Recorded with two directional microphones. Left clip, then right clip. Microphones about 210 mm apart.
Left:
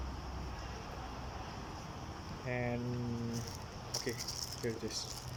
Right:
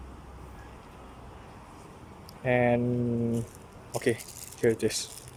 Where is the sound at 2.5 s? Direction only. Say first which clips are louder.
Right 15 dB; 50° right (ahead or behind).